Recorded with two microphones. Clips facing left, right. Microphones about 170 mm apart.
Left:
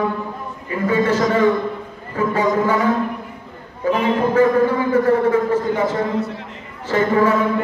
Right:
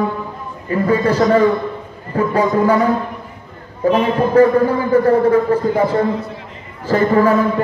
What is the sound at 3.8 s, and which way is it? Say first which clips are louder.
A man's voice: right 3 dB; 30° right (ahead or behind).